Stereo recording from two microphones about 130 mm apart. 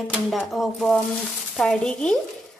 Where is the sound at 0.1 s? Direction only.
Centre (ahead or behind).